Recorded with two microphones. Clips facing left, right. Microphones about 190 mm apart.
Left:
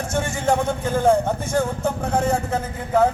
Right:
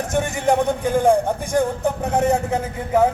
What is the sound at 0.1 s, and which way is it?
Speech, 15° right (ahead or behind).